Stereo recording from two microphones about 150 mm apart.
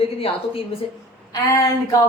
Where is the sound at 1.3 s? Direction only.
25° left (ahead or behind).